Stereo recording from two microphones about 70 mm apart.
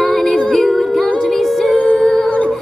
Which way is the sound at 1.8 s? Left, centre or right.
Left.